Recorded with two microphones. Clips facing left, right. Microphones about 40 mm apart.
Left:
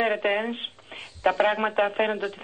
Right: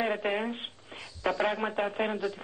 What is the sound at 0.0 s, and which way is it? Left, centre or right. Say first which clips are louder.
Speech: left 5 dB; left.